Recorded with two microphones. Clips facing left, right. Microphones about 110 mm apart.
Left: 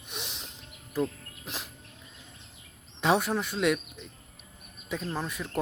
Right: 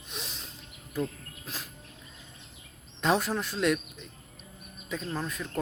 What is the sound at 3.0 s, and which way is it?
Speech, 5° left (ahead or behind).